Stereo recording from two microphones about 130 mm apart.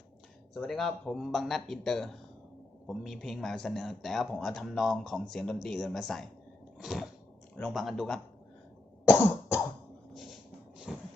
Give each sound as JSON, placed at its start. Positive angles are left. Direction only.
{"t": 0.5, "sound": "speech", "side_deg": 0}
{"t": 6.7, "sound": "a sound", "side_deg": 0}
{"t": 7.7, "sound": "speech", "side_deg": 0}
{"t": 9.0, "sound": "cough", "side_deg": 20}
{"t": 10.9, "sound": "vehicle", "side_deg": 5}